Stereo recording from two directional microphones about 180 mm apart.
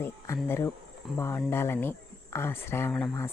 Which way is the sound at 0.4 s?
15° left (ahead or behind).